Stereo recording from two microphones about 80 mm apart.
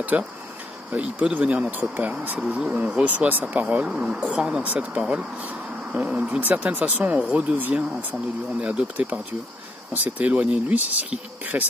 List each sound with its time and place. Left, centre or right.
0.1 s speech: centre